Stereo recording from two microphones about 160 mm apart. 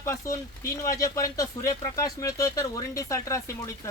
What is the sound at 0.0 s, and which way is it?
Speech, 15° left (ahead or behind).